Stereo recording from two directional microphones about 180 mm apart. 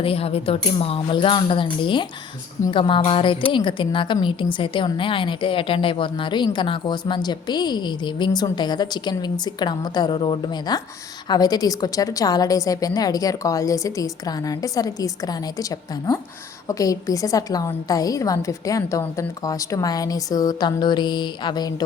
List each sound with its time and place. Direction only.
0.0 s a woman's voice: 30° left (ahead or behind)